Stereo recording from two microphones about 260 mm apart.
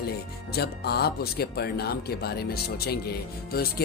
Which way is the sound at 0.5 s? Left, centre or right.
Left.